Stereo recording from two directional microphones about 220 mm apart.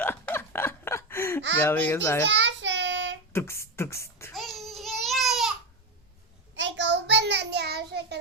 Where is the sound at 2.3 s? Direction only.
55° right (ahead or behind).